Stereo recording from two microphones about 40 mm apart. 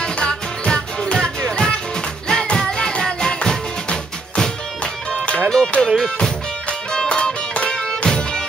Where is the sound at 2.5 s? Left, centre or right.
Centre.